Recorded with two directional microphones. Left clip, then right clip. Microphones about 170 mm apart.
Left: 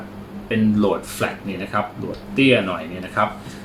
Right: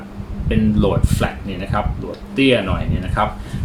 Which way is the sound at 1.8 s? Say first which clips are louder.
Right 1 dB; 15° right (ahead or behind).